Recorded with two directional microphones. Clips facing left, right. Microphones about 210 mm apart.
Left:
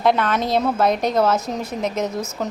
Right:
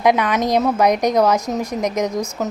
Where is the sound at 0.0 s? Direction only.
15° right (ahead or behind).